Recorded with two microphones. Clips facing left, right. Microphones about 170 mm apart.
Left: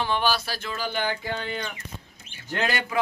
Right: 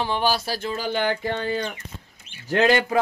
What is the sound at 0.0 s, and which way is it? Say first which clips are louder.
A man's voice: right 2 dB; 35° right (ahead or behind).